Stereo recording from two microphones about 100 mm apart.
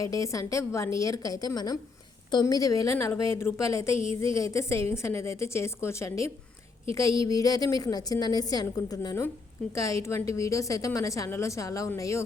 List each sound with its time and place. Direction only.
0.0 s a woman's voice: 35° left (ahead or behind)